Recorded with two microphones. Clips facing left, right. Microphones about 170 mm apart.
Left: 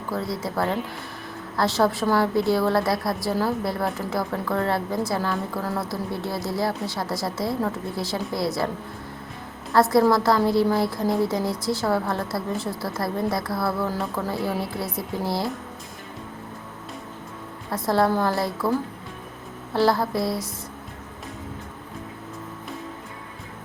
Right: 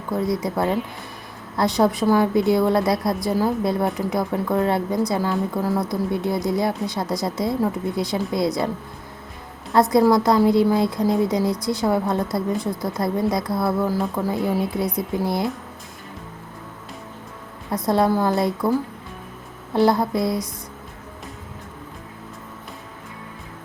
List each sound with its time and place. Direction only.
0.1 s speech: 20° right (ahead or behind)
9.9 s speech: 20° right (ahead or behind)
17.8 s speech: 20° right (ahead or behind)